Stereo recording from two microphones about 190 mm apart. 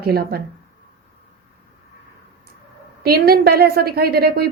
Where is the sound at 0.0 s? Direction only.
55° right (ahead or behind).